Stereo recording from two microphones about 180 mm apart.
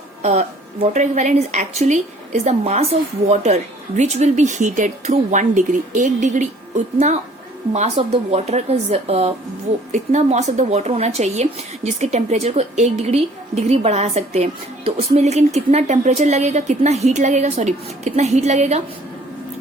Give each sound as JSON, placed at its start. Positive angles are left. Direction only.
{"t": 0.2, "sound": "speech", "side_deg": -40}
{"t": 7.7, "sound": "a woman's voice", "side_deg": -40}